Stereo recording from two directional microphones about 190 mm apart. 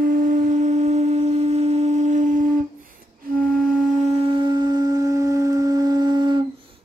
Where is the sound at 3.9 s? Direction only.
35° right (ahead or behind).